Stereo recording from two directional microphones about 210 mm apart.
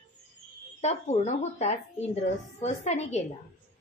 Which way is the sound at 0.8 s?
30° left (ahead or behind).